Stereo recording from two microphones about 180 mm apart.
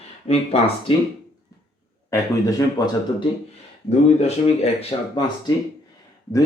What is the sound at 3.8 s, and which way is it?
Speech, 35° left (ahead or behind).